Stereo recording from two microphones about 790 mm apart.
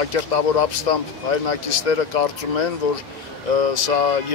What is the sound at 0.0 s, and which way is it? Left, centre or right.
Speech, left.